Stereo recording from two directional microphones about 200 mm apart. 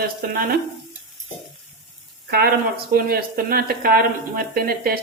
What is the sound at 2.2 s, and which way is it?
Speech, 55° right (ahead or behind).